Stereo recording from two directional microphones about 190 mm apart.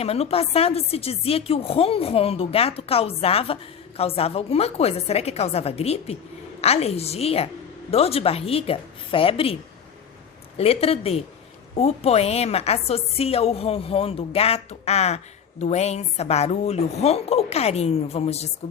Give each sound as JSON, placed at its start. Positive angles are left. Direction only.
{"t": 0.0, "sound": "a woman's voice", "side_deg": 30}
{"t": 10.6, "sound": "a woman's voice", "side_deg": 30}